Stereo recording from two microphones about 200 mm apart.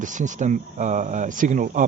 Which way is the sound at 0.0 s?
40° right (ahead or behind).